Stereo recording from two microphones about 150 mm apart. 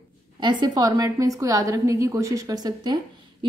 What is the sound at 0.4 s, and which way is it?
A woman's voice, 30° right (ahead or behind).